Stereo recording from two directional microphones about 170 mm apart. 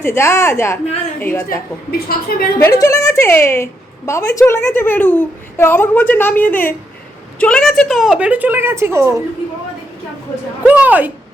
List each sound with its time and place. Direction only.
0.0 s a woman's voice: 15° left (ahead or behind)
1.9 s a woman's voice: 60° left (ahead or behind)
2.7 s a woman's voice: 20° left (ahead or behind); by 9.2 s 15° right (ahead or behind)
10.7 s a woman's voice: 10° right (ahead or behind)